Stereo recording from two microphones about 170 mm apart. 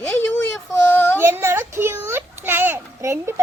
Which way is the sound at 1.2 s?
15° right (ahead or behind).